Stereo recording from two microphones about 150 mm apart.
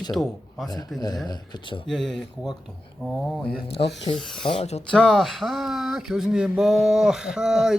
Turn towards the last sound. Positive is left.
turn(degrees=-5)  # may be behind; listen again after turning